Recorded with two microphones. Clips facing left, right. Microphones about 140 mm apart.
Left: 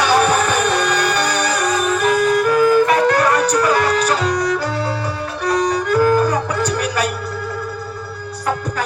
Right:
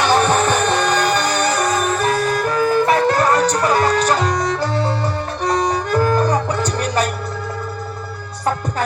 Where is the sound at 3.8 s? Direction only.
10° left (ahead or behind).